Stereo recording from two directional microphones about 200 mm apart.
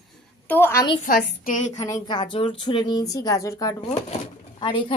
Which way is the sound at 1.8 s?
20° left (ahead or behind).